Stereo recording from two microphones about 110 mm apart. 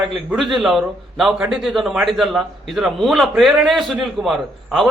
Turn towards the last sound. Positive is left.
turn(degrees=0)  # may be behind; listen again after turning